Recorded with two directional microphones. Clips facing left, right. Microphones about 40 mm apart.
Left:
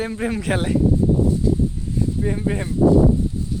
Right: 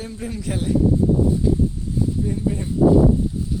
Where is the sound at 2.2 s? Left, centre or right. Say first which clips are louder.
Left 1 dB; left.